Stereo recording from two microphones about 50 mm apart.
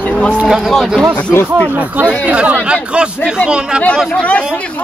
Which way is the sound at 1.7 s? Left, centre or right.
Right.